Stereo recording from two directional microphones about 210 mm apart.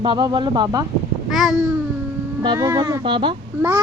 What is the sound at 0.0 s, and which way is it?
Speech, 20° right (ahead or behind).